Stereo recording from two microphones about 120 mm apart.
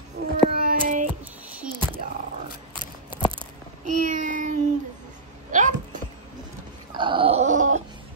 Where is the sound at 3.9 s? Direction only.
90° right.